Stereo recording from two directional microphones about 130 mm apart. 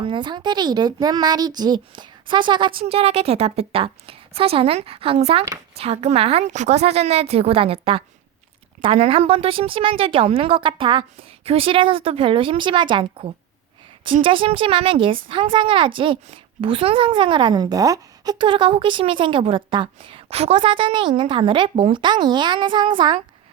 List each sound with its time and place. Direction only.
0.0 s speech: 40° right (ahead or behind)
2.8 s a woman's voice: 50° right (ahead or behind)